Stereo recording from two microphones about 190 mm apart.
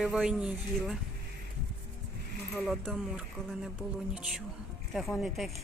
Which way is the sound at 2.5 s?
Centre (ahead or behind).